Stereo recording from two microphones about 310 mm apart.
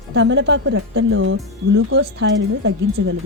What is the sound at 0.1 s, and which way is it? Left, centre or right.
Speech, right.